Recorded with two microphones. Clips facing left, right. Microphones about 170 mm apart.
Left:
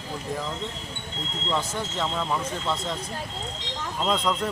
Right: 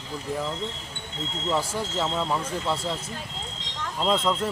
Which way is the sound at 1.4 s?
10° right (ahead or behind).